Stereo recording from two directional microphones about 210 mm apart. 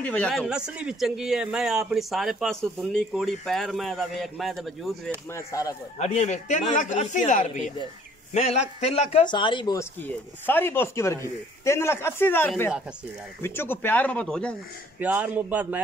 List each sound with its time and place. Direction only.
0.0 s a man's voice: 5° left (ahead or behind)
5.3 s speech: 15° left (ahead or behind)
5.9 s a man's voice: 35° left (ahead or behind)
10.0 s speech: 10° left (ahead or behind)
15.0 s speech: 10° right (ahead or behind)